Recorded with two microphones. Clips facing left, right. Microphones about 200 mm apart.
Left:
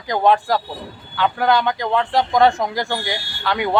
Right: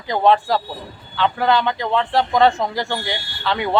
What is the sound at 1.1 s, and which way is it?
A man's voice, 10° left (ahead or behind).